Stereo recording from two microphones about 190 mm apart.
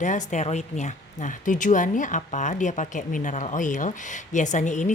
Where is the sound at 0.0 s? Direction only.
40° left (ahead or behind).